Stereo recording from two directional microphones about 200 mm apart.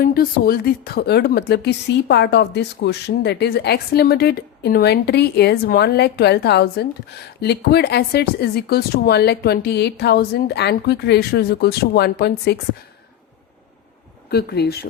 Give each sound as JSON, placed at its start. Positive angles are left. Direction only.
{"t": 0.0, "sound": "a woman's voice", "side_deg": 45}
{"t": 14.3, "sound": "speech", "side_deg": 55}